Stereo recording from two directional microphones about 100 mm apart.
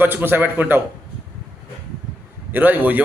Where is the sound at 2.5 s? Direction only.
20° right (ahead or behind).